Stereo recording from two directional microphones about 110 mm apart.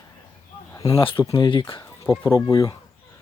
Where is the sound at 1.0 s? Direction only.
50° left (ahead or behind).